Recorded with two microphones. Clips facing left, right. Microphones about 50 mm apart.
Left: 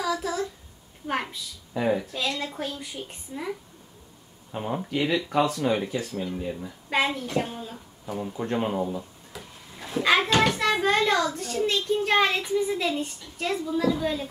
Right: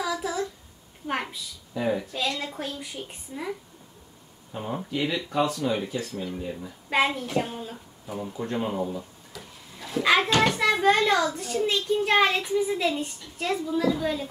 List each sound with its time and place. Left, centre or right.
0.0 s child singing: centre
1.0 s a child's voice: centre
4.5 s speech: centre
5.5 s speech: left
6.1 s speech: centre
6.9 s a woman's voice: centre
8.4 s speech: centre
8.9 s a sound: centre
10.0 s a child's voice: centre